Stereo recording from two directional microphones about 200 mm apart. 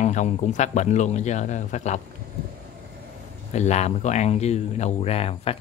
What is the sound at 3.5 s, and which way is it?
Speech, 35° left (ahead or behind).